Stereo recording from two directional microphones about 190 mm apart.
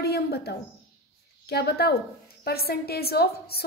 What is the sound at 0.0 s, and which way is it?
A woman's voice, 55° left (ahead or behind).